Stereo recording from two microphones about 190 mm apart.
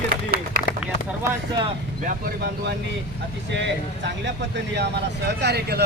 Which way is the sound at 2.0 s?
50° right (ahead or behind).